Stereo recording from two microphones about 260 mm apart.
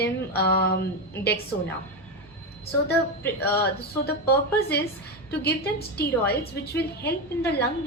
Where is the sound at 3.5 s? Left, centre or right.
Left.